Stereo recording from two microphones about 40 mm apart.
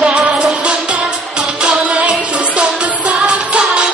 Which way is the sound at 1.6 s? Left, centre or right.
Right.